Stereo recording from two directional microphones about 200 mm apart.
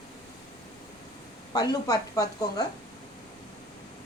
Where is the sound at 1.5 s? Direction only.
20° left (ahead or behind).